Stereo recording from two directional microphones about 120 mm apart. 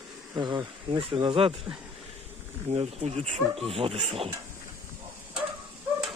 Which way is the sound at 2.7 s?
60° right (ahead or behind).